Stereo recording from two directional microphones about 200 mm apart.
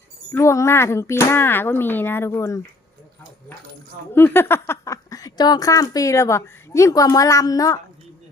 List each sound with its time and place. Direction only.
0.3 s speech: 15° left (ahead or behind)
4.1 s speech: 10° left (ahead or behind)